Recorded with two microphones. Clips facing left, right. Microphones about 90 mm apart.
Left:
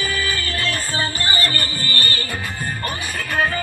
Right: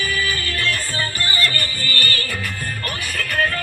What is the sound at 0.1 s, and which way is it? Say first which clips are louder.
Music: even; 30° left (ahead or behind).